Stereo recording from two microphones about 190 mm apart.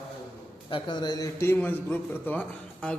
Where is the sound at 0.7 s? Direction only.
25° left (ahead or behind).